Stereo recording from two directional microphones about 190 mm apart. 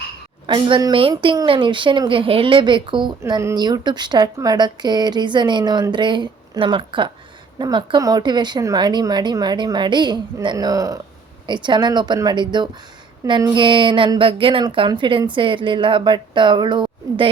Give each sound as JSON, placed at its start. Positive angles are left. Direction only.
{"t": 0.4, "sound": "a woman's voice", "side_deg": -25}